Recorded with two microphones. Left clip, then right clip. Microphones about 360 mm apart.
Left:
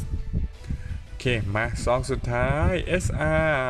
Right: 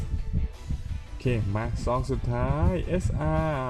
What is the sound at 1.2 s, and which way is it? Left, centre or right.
Speech, left.